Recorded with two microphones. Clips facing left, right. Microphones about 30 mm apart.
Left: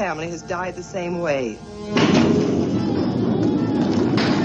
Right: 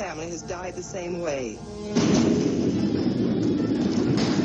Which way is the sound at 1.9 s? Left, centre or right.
Left.